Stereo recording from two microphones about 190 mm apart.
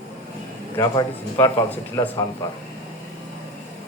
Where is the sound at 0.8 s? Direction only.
20° left (ahead or behind).